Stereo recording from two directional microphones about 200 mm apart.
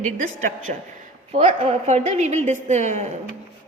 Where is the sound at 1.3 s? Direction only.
30° right (ahead or behind).